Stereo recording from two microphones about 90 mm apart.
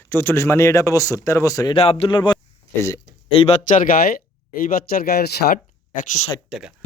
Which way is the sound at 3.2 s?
90° left.